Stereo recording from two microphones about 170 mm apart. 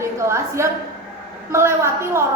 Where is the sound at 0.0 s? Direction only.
15° right (ahead or behind).